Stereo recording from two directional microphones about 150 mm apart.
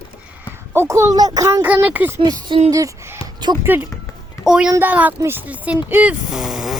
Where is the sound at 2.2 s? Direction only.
30° right (ahead or behind).